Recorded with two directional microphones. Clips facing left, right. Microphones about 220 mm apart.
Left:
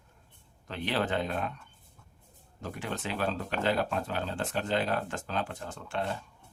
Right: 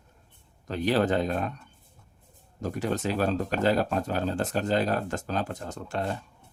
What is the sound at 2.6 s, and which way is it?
Speech, 40° right (ahead or behind).